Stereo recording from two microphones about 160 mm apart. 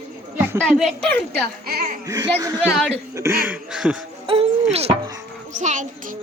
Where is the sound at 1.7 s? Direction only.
75° right (ahead or behind).